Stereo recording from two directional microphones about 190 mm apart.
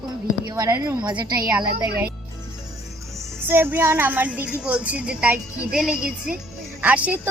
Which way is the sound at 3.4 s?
10° right (ahead or behind).